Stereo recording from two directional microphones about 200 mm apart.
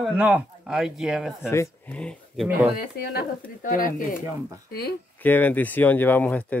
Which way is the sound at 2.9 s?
45° left (ahead or behind).